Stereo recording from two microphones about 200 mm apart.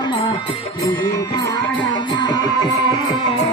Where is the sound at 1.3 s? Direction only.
25° left (ahead or behind).